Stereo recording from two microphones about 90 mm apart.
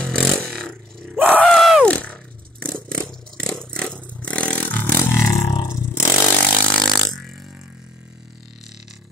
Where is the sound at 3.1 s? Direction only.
5° left (ahead or behind); by 5.1 s 20° left (ahead or behind).